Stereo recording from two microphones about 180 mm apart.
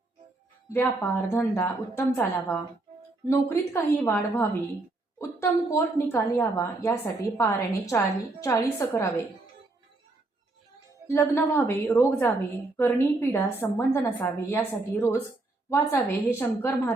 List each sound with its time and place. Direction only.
0.7 s a woman's voice: 10° left (ahead or behind)
11.1 s a woman's voice: 15° left (ahead or behind)